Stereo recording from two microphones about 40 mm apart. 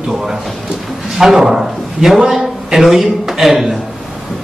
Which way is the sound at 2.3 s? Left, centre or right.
Centre.